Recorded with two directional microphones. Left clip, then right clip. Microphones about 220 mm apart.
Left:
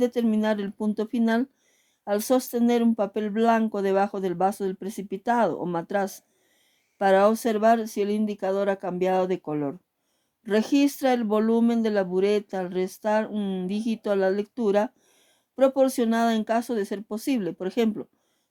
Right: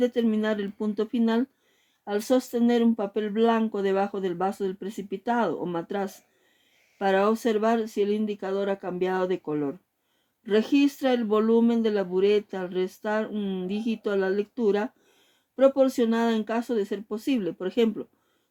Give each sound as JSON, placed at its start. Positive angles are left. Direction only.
{"t": 0.0, "sound": "speech", "side_deg": 35}